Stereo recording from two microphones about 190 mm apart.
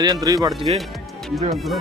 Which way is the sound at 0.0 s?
20° right (ahead or behind).